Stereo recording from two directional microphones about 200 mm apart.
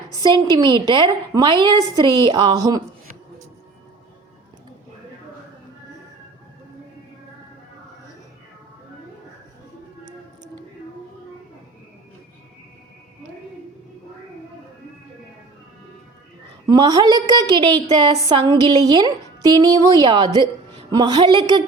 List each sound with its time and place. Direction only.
0.1 s a woman's voice: 20° right (ahead or behind)
16.6 s a woman's voice: 20° right (ahead or behind)